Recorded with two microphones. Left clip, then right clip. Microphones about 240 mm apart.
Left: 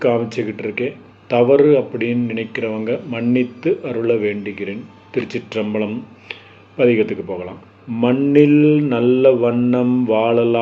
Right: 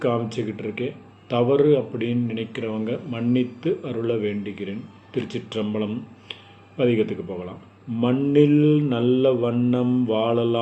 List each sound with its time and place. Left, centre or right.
0.0 s speech: centre